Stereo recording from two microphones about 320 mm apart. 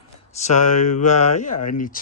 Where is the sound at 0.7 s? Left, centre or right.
Left.